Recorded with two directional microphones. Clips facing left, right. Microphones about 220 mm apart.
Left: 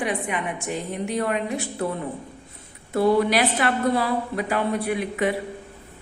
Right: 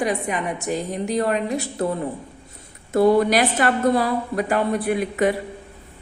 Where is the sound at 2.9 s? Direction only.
45° right (ahead or behind).